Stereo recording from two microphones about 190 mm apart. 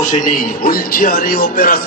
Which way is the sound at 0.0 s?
45° left (ahead or behind).